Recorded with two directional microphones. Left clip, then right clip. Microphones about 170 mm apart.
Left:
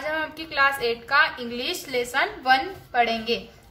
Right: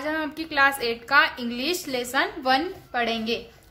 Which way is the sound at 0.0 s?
40° right (ahead or behind).